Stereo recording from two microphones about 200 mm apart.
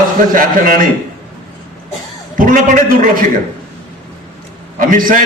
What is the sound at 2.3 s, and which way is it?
Speech, 45° right (ahead or behind).